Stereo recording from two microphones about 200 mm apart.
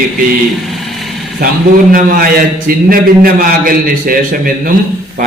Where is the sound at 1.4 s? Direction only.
45° right (ahead or behind).